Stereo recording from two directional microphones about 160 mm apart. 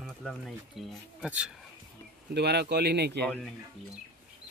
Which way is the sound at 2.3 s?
90° right.